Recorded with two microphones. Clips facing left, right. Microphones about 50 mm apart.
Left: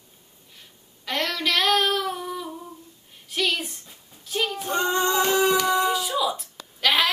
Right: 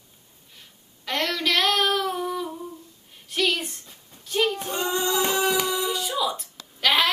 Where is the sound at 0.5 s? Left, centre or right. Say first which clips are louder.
Even; centre.